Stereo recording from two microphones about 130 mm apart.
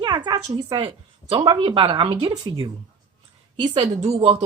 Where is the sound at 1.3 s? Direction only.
45° right (ahead or behind).